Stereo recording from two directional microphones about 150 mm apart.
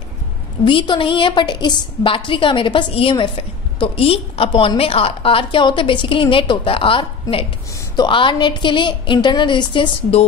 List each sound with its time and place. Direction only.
0.7 s a woman's voice: 35° left (ahead or behind)